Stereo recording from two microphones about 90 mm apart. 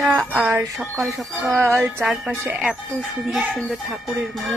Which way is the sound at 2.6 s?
5° right (ahead or behind).